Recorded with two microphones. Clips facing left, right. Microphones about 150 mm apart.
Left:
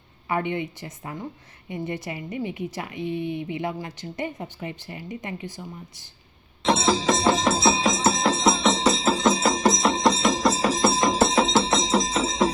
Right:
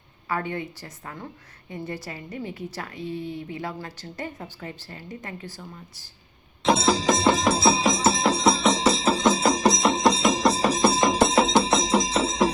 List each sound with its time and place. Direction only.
0.3 s a woman's voice: 20° left (ahead or behind)
3.2 s speech: 60° left (ahead or behind)
3.5 s speech: 15° left (ahead or behind)
6.6 s music: centre (ahead or behind)